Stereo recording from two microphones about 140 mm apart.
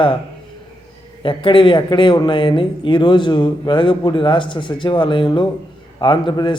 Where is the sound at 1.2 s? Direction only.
40° left (ahead or behind).